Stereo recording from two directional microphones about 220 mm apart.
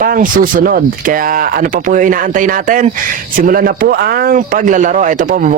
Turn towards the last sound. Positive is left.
turn(degrees=-35)  # may be behind; listen again after turning